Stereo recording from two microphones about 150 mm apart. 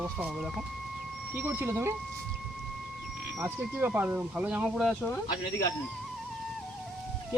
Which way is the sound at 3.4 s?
15° right (ahead or behind).